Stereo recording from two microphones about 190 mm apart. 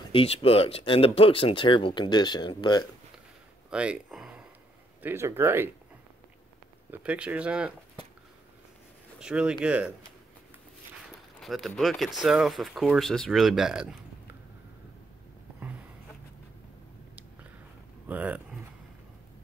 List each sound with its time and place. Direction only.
0.1 s speech: 30° left (ahead or behind)
3.7 s speech: 5° right (ahead or behind)
6.9 s speech: 5° right (ahead or behind)
9.2 s speech: 5° right (ahead or behind)
11.3 s speech: centre (ahead or behind)
18.0 s speech: 10° right (ahead or behind)